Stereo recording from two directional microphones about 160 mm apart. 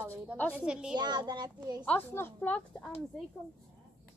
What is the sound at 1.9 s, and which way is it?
Speech, 10° left (ahead or behind).